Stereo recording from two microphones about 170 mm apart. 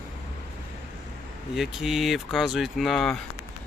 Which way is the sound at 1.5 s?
Centre (ahead or behind).